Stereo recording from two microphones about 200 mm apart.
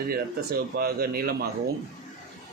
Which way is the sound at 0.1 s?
50° right (ahead or behind).